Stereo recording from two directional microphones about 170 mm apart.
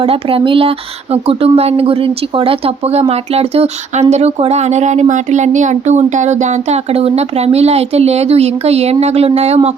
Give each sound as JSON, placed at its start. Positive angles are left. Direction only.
{"t": 0.0, "sound": "speech", "side_deg": -35}